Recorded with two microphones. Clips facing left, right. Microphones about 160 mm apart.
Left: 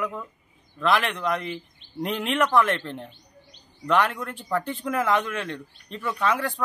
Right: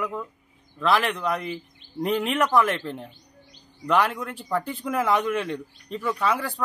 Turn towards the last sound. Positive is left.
turn(degrees=-5)  # may be behind; listen again after turning